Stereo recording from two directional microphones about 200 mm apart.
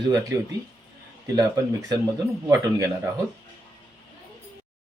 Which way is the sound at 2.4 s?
15° right (ahead or behind).